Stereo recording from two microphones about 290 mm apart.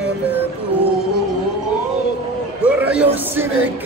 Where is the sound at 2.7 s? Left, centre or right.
Centre.